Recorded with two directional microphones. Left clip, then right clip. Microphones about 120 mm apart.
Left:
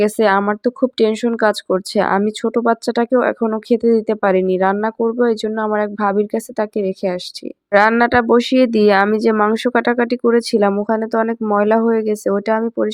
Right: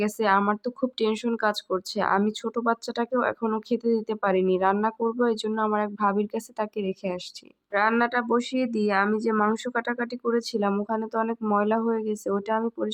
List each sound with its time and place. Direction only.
0.0 s speech: 40° left (ahead or behind)
7.7 s speech: 55° left (ahead or behind)
9.3 s speech: 35° left (ahead or behind)